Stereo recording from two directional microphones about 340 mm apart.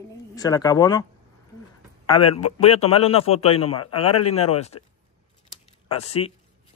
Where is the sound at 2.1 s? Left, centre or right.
Centre.